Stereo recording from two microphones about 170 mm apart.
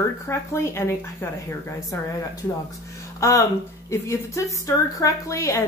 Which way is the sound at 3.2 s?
20° left (ahead or behind).